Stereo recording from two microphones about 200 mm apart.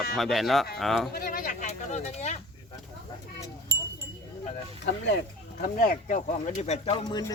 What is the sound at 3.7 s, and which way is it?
Wind chime, 55° right (ahead or behind).